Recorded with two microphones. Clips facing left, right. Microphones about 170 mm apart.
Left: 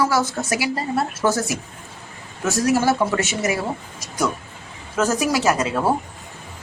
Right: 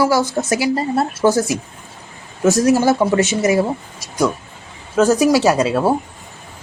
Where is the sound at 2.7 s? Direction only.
20° right (ahead or behind).